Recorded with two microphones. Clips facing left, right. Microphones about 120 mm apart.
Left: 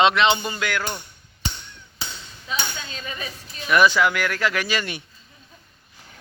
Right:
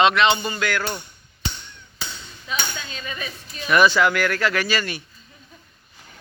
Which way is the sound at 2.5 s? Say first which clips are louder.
Even; 30° left (ahead or behind).